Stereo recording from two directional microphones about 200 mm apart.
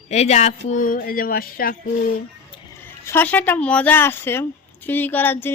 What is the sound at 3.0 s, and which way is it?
A woman's voice, 10° left (ahead or behind).